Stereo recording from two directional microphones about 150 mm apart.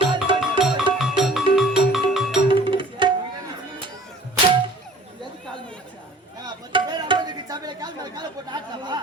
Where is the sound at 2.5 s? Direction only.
35° right (ahead or behind).